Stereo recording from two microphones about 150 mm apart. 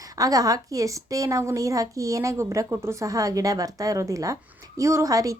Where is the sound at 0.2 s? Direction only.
25° right (ahead or behind).